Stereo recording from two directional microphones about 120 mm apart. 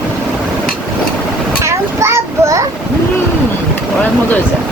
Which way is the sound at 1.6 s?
25° right (ahead or behind).